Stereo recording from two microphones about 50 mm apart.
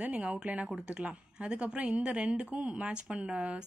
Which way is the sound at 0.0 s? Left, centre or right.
Right.